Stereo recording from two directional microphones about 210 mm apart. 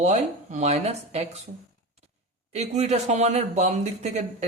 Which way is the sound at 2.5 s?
30° right (ahead or behind).